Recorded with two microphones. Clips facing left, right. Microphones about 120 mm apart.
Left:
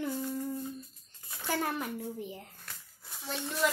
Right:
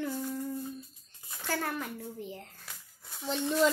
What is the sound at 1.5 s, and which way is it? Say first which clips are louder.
A child's voice: left 1 dB; 15° left (ahead or behind).